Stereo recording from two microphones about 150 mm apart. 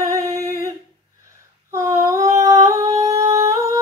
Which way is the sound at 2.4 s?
20° right (ahead or behind).